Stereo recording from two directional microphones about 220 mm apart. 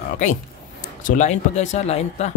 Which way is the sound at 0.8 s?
35° left (ahead or behind).